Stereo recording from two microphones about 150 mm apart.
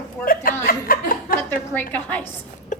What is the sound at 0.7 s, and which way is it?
Speech, 70° left (ahead or behind).